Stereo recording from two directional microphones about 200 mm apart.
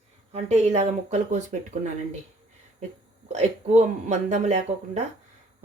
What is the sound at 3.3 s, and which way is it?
Speech, 35° right (ahead or behind).